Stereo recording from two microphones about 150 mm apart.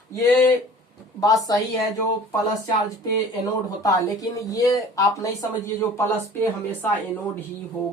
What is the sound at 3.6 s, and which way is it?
Speech, 20° left (ahead or behind).